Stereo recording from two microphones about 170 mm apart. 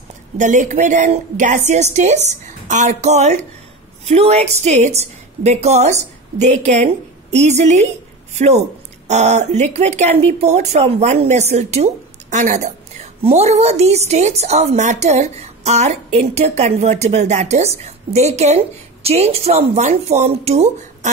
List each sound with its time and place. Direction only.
0.4 s a woman's voice: 45° right (ahead or behind)